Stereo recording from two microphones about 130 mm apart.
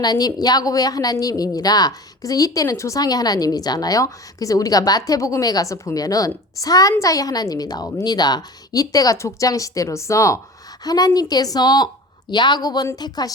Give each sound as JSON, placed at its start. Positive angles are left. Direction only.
{"t": 0.0, "sound": "a woman's voice", "side_deg": 30}